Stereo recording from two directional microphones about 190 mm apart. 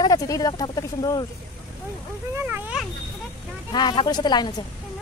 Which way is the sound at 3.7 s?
25° left (ahead or behind).